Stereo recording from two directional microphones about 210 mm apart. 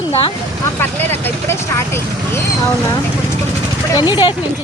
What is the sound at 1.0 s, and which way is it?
Speech, 10° left (ahead or behind).